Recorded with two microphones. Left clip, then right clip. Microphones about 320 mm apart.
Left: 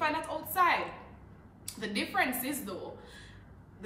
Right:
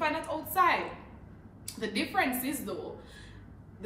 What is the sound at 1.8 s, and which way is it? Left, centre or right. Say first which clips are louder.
Speech: right 1 dB; centre.